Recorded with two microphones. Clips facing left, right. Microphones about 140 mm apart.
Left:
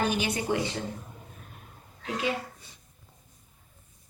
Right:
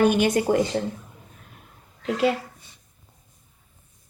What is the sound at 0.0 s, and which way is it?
Speech, 55° right (ahead or behind).